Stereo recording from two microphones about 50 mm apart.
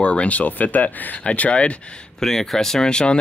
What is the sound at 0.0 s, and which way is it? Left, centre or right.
Speech, left.